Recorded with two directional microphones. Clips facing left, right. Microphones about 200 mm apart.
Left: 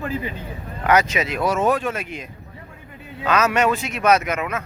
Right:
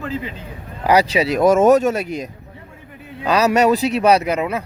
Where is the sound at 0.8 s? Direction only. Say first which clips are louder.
Right 4 dB; 35° right (ahead or behind).